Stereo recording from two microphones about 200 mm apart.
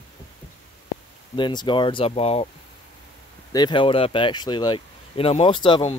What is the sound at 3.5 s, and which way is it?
Speech, 20° left (ahead or behind).